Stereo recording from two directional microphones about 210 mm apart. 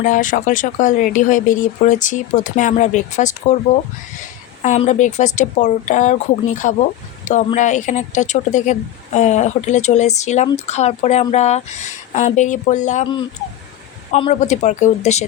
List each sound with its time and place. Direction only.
0.0 s speech: 40° left (ahead or behind)
4.6 s speech: 35° left (ahead or behind)
14.1 s speech: 30° left (ahead or behind)